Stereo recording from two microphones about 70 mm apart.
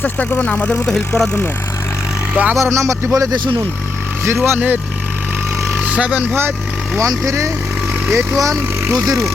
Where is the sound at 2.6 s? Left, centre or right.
Right.